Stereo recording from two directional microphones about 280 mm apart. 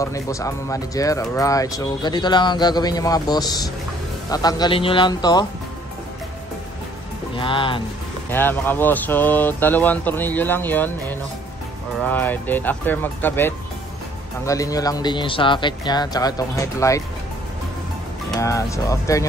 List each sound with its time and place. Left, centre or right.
0.0 s speech: centre
7.3 s speech: centre
8.3 s speech: centre
18.4 s speech: centre